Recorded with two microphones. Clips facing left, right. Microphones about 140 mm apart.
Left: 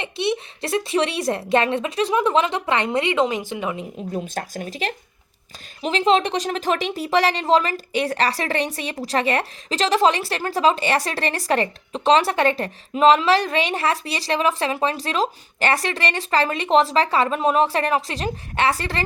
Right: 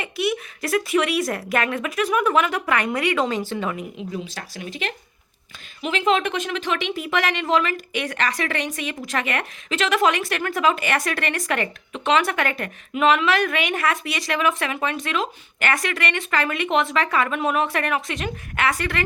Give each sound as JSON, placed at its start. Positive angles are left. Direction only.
{"t": 0.0, "sound": "a woman's voice", "side_deg": 25}
{"t": 4.1, "sound": "speech", "side_deg": 45}